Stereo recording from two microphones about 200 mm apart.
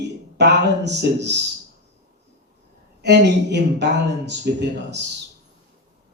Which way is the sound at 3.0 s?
60° right (ahead or behind).